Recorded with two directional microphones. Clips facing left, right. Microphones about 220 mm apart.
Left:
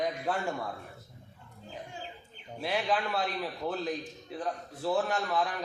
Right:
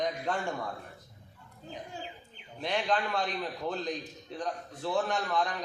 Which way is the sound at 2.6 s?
5° left (ahead or behind).